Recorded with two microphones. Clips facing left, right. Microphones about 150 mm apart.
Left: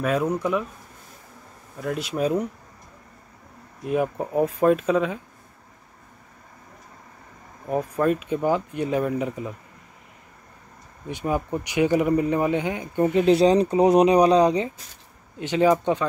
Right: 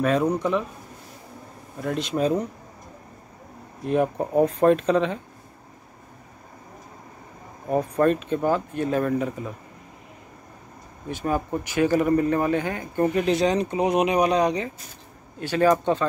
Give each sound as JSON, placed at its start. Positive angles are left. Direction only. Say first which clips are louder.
{"t": 0.0, "sound": "speech", "louder": "right 2 dB", "side_deg": 5}
{"t": 1.8, "sound": "speech", "louder": "right 1 dB", "side_deg": 5}
{"t": 3.8, "sound": "speech", "louder": "right 2 dB", "side_deg": 5}
{"t": 7.6, "sound": "speech", "louder": "right 2 dB", "side_deg": 0}
{"t": 11.1, "sound": "speech", "louder": "even", "side_deg": 15}
{"t": 13.2, "sound": "speech", "louder": "left 9 dB", "side_deg": 30}
{"t": 15.3, "sound": "speech", "louder": "left 1 dB", "side_deg": 20}